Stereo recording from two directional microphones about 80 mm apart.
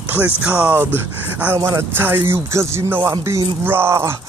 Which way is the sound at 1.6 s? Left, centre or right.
Right.